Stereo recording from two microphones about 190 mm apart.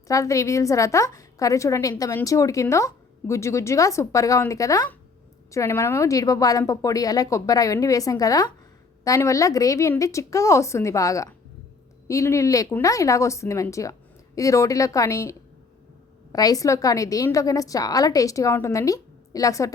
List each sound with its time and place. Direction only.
0.1 s a woman's voice: 15° left (ahead or behind)